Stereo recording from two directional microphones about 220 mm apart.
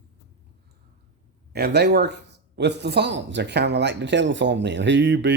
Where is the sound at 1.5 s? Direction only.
50° right (ahead or behind).